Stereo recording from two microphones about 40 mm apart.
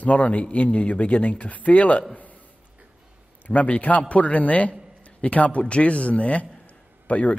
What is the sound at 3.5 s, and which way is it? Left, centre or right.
A man's voice, left.